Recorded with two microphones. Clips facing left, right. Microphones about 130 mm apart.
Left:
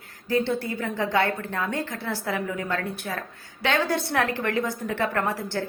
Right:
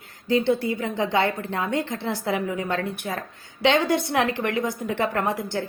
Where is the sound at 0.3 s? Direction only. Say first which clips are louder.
Right 3 dB; 15° right (ahead or behind).